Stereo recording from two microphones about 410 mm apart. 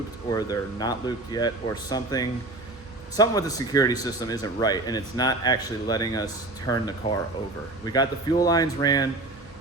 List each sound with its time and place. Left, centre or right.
0.3 s a man's voice: centre